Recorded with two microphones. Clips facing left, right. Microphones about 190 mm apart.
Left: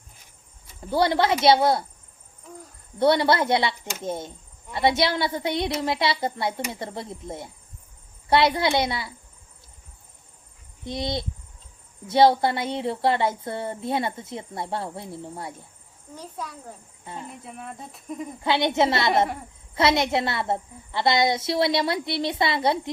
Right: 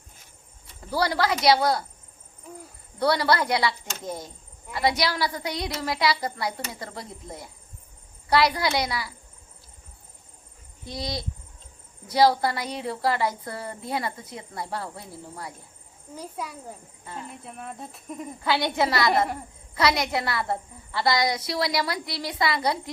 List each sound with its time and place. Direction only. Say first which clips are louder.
0.8 s a woman's voice: left 3 dB; 25° left (ahead or behind)
3.0 s a woman's voice: left 3 dB; 25° left (ahead or behind)
10.8 s a woman's voice: left 4 dB; 25° left (ahead or behind)
16.1 s a child's voice: right 1 dB; 10° right (ahead or behind)
18.4 s a woman's voice: left 3 dB; 20° left (ahead or behind)